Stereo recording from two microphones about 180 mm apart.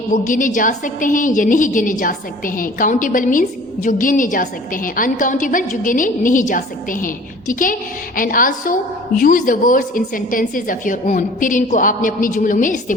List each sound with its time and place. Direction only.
0.1 s a woman's voice: 45° left (ahead or behind)